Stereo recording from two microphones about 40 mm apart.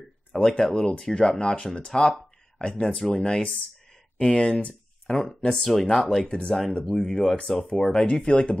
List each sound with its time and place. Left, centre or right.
0.3 s speech: centre
6.2 s speech: left